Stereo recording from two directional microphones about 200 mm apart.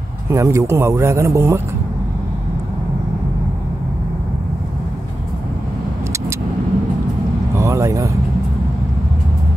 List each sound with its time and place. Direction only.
0.3 s a man's voice: 15° right (ahead or behind)
7.5 s vehicle: 15° right (ahead or behind)